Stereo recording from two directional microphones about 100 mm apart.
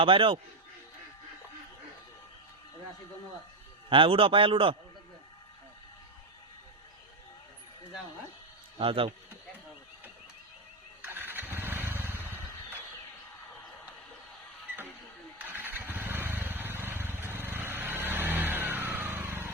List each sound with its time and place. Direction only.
0.0 s a man's voice: 60° right (ahead or behind)
3.8 s a man's voice: 60° right (ahead or behind)
8.8 s a man's voice: 60° right (ahead or behind)
11.0 s motorcycle: 20° right (ahead or behind)
15.4 s vehicle: 20° right (ahead or behind)